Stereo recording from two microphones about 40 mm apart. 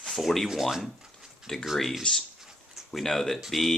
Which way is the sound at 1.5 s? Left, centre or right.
Centre.